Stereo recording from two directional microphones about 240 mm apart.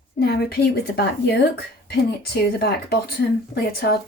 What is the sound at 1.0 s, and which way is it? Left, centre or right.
Speech, left.